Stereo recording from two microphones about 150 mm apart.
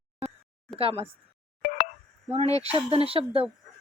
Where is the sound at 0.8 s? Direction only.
40° right (ahead or behind).